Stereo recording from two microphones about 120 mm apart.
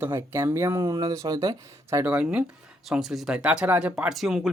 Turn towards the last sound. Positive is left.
turn(degrees=0)  # may be behind; listen again after turning